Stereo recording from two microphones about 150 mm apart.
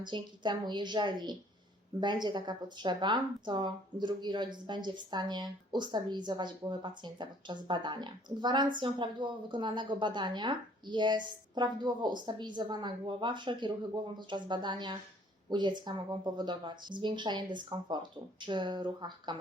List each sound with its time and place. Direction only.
0.0 s speech: 30° right (ahead or behind)